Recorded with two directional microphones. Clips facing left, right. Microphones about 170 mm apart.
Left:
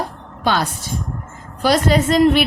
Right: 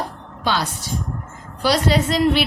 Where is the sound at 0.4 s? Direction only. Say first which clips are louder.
Left 3 dB; 50° left (ahead or behind).